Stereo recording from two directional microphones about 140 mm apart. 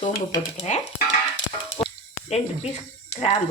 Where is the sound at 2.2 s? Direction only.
50° left (ahead or behind).